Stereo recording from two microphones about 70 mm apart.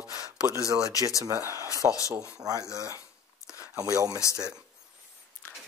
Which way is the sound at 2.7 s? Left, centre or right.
Right.